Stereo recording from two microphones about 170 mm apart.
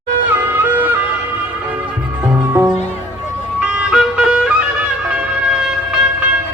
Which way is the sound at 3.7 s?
5° right (ahead or behind).